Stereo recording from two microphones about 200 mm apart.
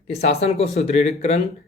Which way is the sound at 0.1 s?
30° left (ahead or behind).